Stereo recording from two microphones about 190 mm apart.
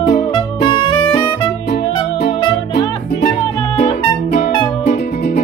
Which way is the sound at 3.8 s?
40° left (ahead or behind).